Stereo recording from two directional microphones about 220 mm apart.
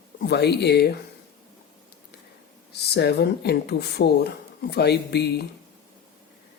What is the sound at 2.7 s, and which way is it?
Speech, 45° left (ahead or behind).